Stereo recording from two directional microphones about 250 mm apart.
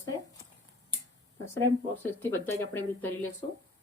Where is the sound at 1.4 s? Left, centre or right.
Centre.